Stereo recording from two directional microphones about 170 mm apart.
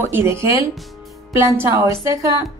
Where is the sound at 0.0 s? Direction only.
15° right (ahead or behind).